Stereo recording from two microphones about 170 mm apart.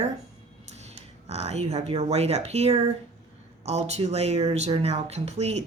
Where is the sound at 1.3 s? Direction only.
40° right (ahead or behind).